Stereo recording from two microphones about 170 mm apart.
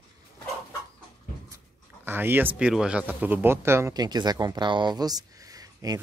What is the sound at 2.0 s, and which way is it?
Speech, 10° right (ahead or behind).